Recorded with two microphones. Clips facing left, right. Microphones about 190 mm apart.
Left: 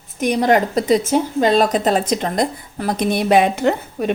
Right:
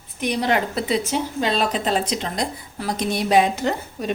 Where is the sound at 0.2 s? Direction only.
45° left (ahead or behind).